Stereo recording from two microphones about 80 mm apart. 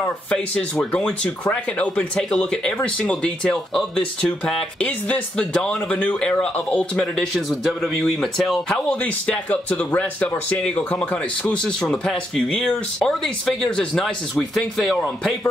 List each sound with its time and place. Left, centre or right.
0.9 s speech: centre
7.2 s speech: centre
8.8 s speech: centre
11.4 s speech: centre